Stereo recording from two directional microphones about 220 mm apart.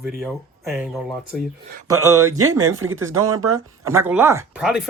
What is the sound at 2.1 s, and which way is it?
Speech, 85° right.